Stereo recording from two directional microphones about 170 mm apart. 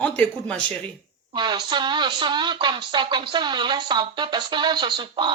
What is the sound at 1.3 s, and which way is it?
Speech, 25° right (ahead or behind).